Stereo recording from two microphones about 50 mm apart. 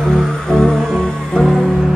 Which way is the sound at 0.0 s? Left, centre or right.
Centre.